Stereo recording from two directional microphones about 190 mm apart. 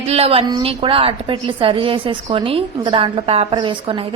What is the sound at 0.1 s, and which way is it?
A woman's voice, 30° right (ahead or behind).